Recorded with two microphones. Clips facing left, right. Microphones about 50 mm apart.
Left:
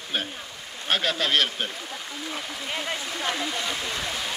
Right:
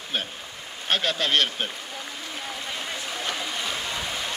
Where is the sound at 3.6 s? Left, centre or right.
Centre.